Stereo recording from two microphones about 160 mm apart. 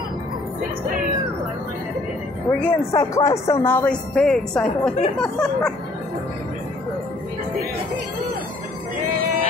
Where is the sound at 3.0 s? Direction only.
20° left (ahead or behind).